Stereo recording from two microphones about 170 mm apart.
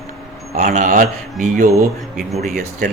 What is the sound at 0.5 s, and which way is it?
Speech, 50° right (ahead or behind).